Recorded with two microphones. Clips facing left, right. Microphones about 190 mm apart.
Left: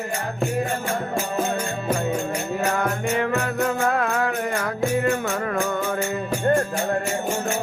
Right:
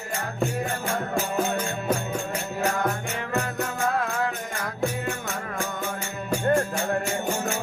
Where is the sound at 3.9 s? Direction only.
70° left (ahead or behind).